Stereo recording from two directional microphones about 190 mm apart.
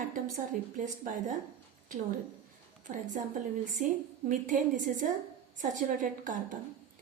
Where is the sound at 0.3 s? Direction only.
45° right (ahead or behind).